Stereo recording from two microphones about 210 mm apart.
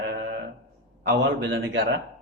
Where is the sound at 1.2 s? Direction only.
60° right (ahead or behind).